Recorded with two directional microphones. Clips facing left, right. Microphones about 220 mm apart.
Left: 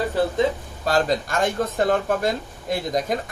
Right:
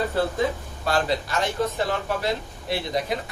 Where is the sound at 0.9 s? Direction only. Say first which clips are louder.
Left 3 dB; 45° left (ahead or behind).